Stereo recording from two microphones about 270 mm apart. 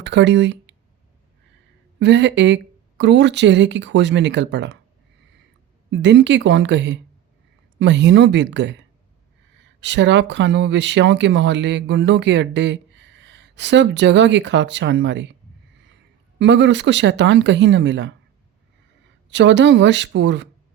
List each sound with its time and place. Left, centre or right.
0.0 s a sound: right
2.0 s speech: right
5.9 s speech: right
9.8 s speech: right
16.4 s speech: right
19.3 s speech: right